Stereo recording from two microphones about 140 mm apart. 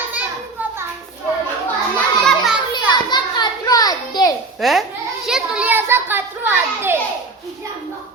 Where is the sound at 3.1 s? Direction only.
30° left (ahead or behind).